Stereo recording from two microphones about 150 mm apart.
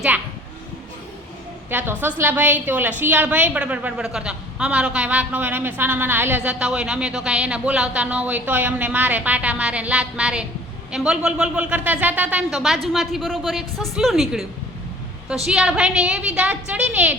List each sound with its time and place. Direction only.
1.7 s a woman's voice: 15° right (ahead or behind)
15.4 s a woman's voice: 5° right (ahead or behind)